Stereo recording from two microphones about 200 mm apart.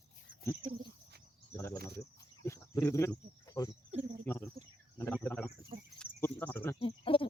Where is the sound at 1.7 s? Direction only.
50° right (ahead or behind).